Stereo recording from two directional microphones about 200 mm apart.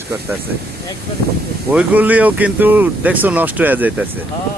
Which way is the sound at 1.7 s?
5° right (ahead or behind).